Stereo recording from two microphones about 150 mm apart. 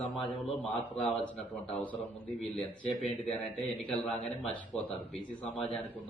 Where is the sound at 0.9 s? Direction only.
5° left (ahead or behind).